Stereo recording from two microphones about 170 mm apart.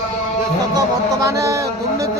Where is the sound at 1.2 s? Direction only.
20° right (ahead or behind).